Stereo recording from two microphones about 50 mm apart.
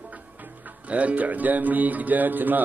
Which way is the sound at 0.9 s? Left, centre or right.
Right.